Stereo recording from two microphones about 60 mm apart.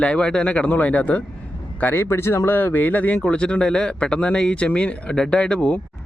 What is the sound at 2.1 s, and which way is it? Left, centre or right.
Speech, left.